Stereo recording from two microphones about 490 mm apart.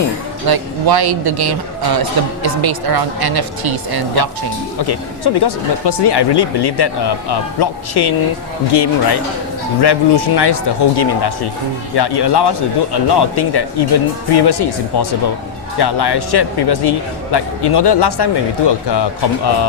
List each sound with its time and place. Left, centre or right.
0.4 s a man's voice: right
4.8 s speech: left